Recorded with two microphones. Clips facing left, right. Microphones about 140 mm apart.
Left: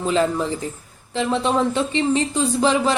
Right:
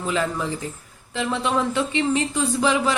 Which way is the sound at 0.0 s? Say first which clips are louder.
Left 5 dB; 30° left (ahead or behind).